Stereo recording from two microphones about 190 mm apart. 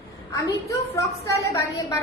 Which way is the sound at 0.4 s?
15° left (ahead or behind).